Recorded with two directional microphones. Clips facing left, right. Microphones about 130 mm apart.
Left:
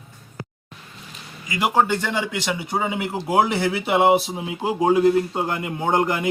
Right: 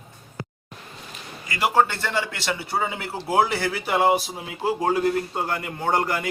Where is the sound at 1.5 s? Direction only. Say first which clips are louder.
Left 1 dB; 15° left (ahead or behind).